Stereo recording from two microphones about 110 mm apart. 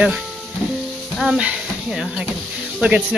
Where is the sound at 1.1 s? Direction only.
5° right (ahead or behind).